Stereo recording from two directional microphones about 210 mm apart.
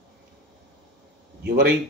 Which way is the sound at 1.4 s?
50° right (ahead or behind).